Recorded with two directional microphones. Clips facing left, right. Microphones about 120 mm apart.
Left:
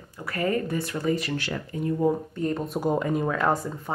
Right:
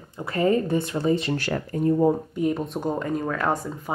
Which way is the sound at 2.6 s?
5° left (ahead or behind).